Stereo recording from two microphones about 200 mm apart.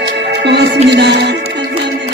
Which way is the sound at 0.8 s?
60° right (ahead or behind).